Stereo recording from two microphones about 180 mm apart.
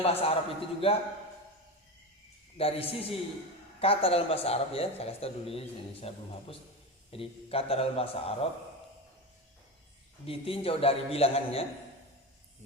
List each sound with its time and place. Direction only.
0.0 s speech: 35° left (ahead or behind)
2.6 s speech: 30° left (ahead or behind)
10.2 s speech: 30° left (ahead or behind)